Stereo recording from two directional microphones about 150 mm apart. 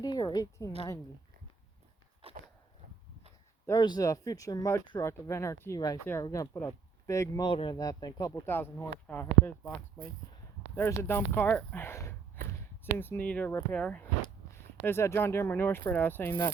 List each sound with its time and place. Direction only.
0.0 s a woman's voice: 25° left (ahead or behind)
3.7 s speech: 25° left (ahead or behind)
7.4 s speech: 30° left (ahead or behind)
8.3 s speech: 15° left (ahead or behind)